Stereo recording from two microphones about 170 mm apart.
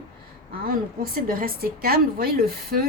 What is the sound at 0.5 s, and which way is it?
A woman's voice, 60° right (ahead or behind).